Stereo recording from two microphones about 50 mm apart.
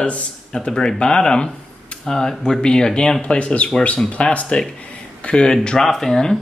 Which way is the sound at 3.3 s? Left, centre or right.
Left.